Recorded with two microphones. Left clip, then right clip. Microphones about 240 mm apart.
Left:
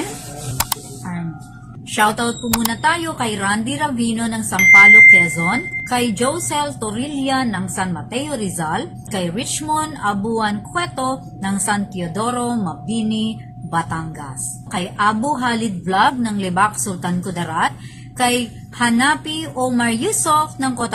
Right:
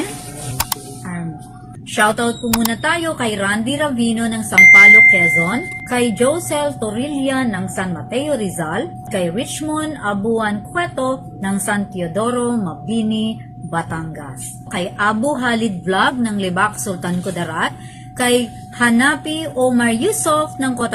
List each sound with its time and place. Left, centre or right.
0.5 s music: centre
2.0 s a woman's voice: centre